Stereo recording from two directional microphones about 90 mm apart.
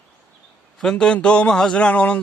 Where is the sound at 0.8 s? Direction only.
5° left (ahead or behind).